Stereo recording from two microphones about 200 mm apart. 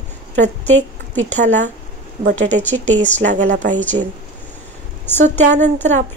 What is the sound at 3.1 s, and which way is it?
Speech, 40° right (ahead or behind).